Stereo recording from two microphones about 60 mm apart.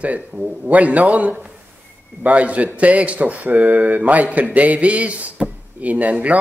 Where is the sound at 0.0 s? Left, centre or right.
Right.